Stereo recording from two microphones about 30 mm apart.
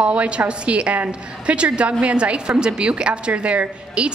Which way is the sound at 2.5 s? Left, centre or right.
Right.